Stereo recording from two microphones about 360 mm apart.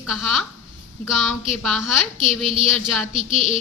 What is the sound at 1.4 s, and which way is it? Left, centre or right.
Speech, centre.